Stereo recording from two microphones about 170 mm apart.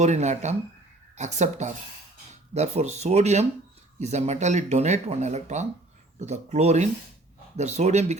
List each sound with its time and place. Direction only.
0.0 s speech: 40° right (ahead or behind)